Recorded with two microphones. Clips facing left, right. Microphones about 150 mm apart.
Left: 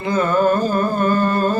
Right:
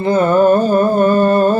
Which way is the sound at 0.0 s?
30° right (ahead or behind).